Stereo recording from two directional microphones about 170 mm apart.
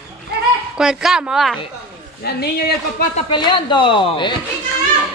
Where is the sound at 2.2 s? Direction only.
70° left (ahead or behind).